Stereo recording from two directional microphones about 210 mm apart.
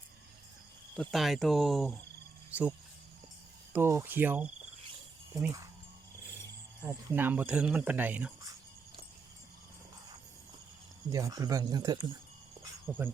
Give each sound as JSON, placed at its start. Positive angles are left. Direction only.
{"t": 0.9, "sound": "speech", "side_deg": 0}
{"t": 2.5, "sound": "cricket", "side_deg": -5}
{"t": 3.7, "sound": "speech", "side_deg": -10}
{"t": 6.8, "sound": "speech", "side_deg": -10}
{"t": 11.1, "sound": "speech", "side_deg": -15}